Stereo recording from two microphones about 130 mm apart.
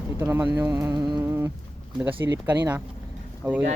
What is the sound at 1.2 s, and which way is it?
Humming, 20° right (ahead or behind).